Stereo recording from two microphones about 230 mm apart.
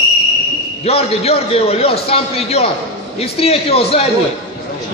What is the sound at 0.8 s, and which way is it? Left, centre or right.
A man's voice, left.